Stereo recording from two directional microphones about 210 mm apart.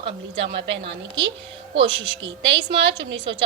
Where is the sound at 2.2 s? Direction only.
55° right (ahead or behind).